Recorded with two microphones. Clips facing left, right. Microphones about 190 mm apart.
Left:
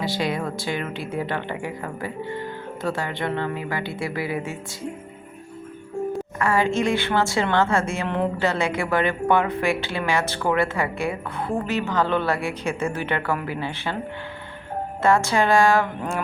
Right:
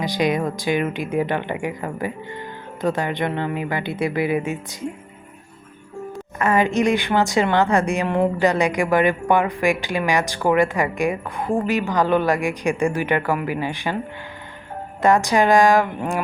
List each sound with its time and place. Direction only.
0.0 s a woman's voice: 15° right (ahead or behind)
6.4 s a woman's voice: 20° right (ahead or behind)
15.0 s a woman's voice: 15° right (ahead or behind)